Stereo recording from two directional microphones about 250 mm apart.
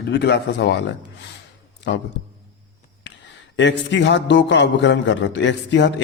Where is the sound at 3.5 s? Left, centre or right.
Left.